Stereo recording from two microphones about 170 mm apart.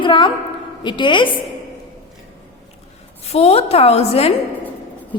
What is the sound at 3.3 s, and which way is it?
A woman's voice, 40° left (ahead or behind).